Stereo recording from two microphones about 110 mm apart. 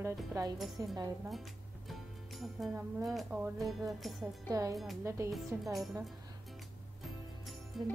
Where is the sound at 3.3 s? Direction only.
10° right (ahead or behind).